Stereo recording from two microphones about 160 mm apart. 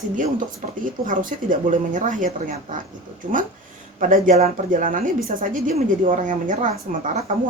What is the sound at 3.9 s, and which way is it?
A woman's voice, 55° right (ahead or behind).